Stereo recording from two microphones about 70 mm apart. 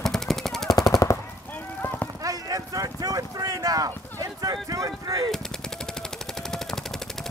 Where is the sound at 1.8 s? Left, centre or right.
Left.